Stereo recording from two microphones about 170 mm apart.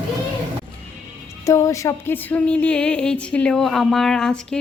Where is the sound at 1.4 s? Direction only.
20° left (ahead or behind).